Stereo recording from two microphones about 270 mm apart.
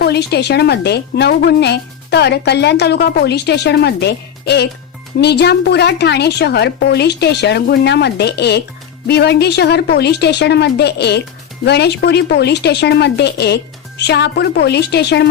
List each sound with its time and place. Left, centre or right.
0.0 s a woman's voice: left